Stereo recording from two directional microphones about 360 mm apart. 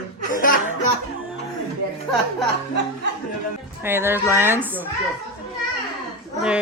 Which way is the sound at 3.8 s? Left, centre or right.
Centre.